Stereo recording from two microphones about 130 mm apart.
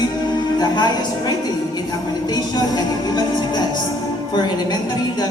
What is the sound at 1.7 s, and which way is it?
Music, 30° left (ahead or behind).